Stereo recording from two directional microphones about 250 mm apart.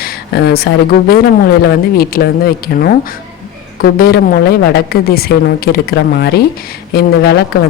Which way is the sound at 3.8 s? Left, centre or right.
Left.